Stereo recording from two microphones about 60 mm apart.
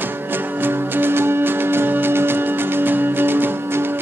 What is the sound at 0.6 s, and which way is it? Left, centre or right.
Music, right.